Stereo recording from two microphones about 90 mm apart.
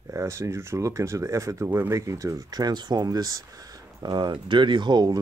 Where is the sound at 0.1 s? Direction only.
35° right (ahead or behind).